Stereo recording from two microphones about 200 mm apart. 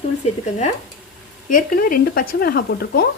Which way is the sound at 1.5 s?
45° left (ahead or behind).